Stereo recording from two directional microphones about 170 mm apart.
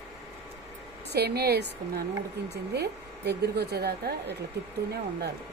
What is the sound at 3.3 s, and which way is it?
Speech, 75° right (ahead or behind).